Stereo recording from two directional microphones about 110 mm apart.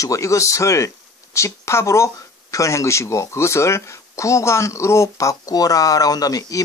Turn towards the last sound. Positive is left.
turn(degrees=35)  # may be behind; listen again after turning